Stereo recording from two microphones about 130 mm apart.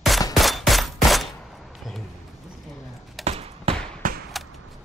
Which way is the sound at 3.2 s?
50° right (ahead or behind).